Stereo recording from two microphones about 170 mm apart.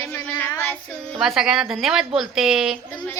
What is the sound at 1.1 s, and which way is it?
A woman's voice, centre (ahead or behind).